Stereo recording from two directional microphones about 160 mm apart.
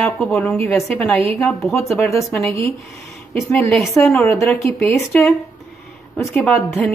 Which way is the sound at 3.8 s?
15° left (ahead or behind).